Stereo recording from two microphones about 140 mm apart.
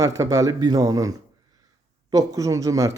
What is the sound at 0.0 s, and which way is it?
Speech, 20° right (ahead or behind).